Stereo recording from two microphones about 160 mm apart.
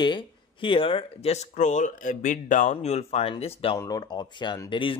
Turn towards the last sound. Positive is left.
turn(degrees=30)  # may be behind; listen again after turning